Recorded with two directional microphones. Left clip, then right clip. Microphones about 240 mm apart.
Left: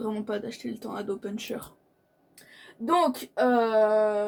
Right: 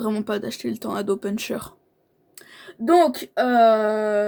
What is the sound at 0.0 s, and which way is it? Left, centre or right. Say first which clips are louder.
Speech: right 6 dB; right.